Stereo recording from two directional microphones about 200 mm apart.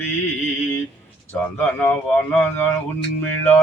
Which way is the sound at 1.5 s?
10° left (ahead or behind).